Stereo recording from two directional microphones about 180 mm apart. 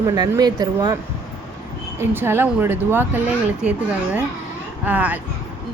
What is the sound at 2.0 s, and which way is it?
A woman's voice, 10° right (ahead or behind).